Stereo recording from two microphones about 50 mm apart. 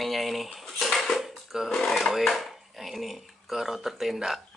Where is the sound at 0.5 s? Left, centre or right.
Centre.